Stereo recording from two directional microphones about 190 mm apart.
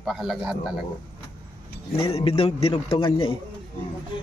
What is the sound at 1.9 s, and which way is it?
Speech, 30° left (ahead or behind).